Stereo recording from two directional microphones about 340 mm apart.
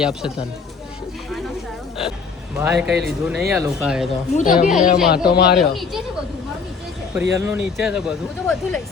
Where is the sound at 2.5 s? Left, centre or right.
Centre.